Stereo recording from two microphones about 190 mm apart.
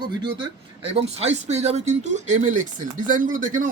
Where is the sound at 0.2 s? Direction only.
25° right (ahead or behind).